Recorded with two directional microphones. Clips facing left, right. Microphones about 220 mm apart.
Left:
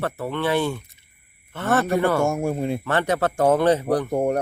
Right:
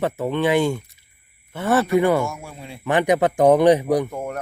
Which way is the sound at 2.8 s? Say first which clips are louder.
Right 9 dB; 15° right (ahead or behind).